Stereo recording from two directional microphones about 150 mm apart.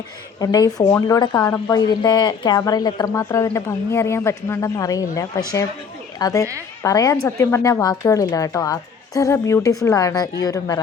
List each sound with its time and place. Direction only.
0.3 s a woman's voice: 25° left (ahead or behind)